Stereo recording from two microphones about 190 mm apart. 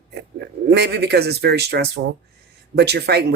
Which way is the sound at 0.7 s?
60° right (ahead or behind).